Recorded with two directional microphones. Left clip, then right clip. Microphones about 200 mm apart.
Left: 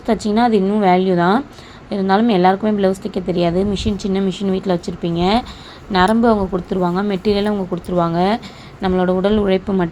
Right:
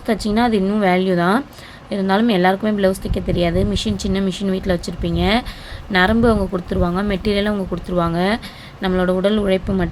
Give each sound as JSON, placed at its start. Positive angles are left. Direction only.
{"t": 0.0, "sound": "a woman's voice", "side_deg": -5}